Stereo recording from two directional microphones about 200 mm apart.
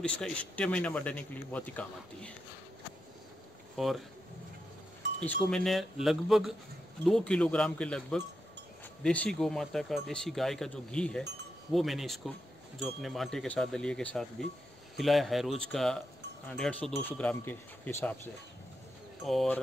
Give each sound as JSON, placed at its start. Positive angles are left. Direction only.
{"t": 0.0, "sound": "speech", "side_deg": 5}
{"t": 3.7, "sound": "speech", "side_deg": 0}
{"t": 5.2, "sound": "speech", "side_deg": 5}